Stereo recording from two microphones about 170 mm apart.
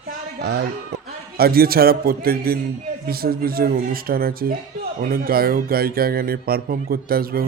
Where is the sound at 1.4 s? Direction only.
60° right (ahead or behind).